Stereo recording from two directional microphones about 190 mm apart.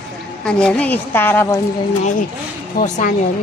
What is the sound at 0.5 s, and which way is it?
A woman's voice, 5° left (ahead or behind).